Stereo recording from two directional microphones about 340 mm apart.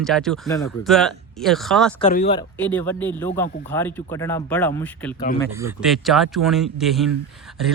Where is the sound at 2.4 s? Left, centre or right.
Centre.